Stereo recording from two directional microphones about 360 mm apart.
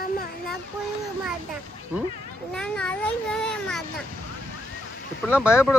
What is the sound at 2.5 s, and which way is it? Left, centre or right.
Children playing, centre.